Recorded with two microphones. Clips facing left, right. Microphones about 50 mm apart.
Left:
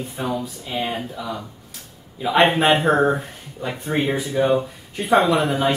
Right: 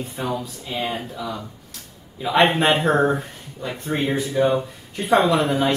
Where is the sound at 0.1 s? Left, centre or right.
Centre.